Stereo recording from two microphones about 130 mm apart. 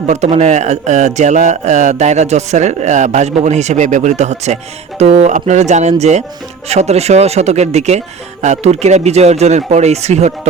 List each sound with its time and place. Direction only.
0.0 s speech: 60° right (ahead or behind)